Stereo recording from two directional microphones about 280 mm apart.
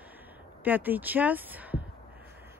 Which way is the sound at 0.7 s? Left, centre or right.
Centre.